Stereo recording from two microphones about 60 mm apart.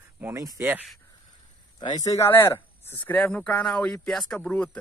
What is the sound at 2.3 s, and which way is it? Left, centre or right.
Speech, left.